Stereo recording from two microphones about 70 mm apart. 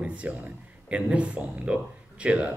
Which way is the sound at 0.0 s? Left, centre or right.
Centre.